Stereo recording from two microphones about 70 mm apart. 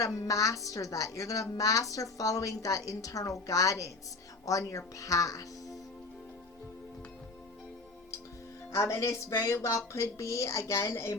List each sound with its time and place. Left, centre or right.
0.0 s a woman's voice: left
8.7 s speech: left